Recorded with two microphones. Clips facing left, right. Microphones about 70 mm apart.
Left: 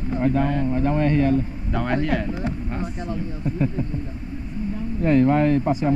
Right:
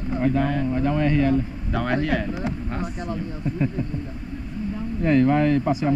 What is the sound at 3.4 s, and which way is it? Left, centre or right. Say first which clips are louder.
Speech: left 1 dB; left.